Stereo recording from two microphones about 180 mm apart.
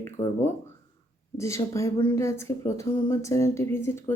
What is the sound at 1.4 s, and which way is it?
Speech, 15° left (ahead or behind).